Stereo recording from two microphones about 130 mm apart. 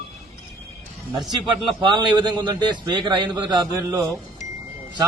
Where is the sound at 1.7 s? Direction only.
35° right (ahead or behind).